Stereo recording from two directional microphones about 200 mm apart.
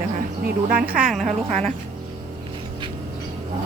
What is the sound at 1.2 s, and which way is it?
Speech, 35° right (ahead or behind).